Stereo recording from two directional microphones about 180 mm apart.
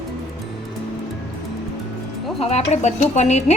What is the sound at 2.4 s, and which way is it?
Speech, 35° left (ahead or behind).